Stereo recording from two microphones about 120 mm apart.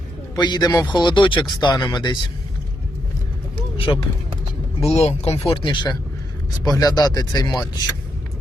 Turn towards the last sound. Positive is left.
turn(degrees=35)  # may be behind; listen again after turning